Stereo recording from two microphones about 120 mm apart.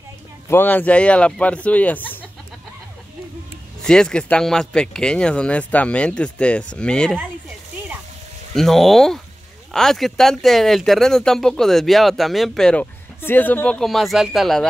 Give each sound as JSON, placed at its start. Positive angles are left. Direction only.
{"t": 0.5, "sound": "speech", "side_deg": 15}
{"t": 3.8, "sound": "speech", "side_deg": 5}
{"t": 8.5, "sound": "speech", "side_deg": 0}
{"t": 13.2, "sound": "speech", "side_deg": 15}
{"t": 13.7, "sound": "speech", "side_deg": 0}